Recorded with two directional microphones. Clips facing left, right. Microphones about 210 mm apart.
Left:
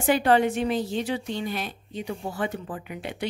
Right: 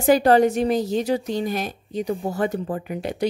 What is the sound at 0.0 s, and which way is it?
A woman's voice, 40° right (ahead or behind).